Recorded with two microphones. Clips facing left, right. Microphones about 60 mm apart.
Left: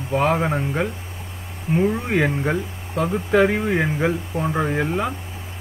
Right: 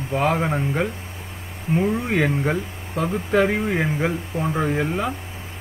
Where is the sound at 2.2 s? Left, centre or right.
Centre.